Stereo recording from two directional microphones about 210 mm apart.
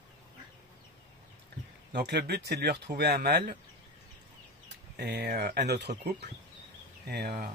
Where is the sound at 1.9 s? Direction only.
50° right (ahead or behind).